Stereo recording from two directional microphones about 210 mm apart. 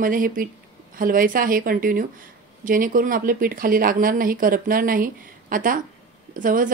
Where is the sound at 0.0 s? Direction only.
40° right (ahead or behind).